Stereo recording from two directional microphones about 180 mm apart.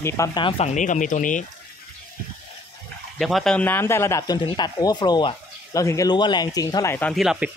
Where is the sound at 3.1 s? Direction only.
Centre (ahead or behind).